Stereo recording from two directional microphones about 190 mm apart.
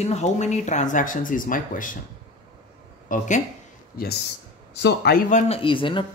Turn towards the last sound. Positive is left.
turn(degrees=25)  # may be behind; listen again after turning